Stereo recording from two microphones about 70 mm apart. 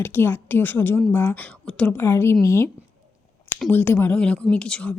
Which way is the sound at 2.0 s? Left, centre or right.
Left.